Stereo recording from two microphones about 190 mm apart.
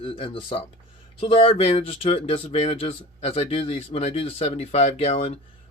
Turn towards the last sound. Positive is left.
turn(degrees=30)  # may be behind; listen again after turning